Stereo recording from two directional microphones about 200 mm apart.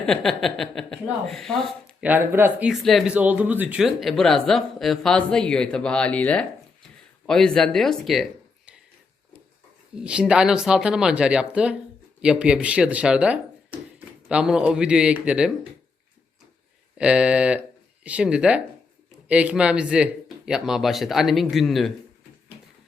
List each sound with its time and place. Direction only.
0.0 s speech: centre (ahead or behind)
2.0 s speech: 10° right (ahead or behind)
10.0 s speech: 5° right (ahead or behind)
17.0 s speech: 5° right (ahead or behind)